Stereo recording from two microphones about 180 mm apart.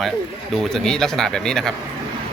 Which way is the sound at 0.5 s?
Centre (ahead or behind).